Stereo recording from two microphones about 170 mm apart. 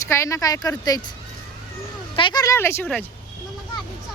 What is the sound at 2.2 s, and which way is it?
Speech, 25° left (ahead or behind).